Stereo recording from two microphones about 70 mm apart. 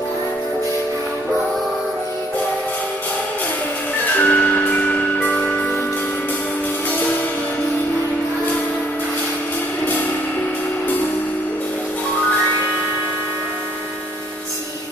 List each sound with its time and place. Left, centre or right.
4.2 s music: left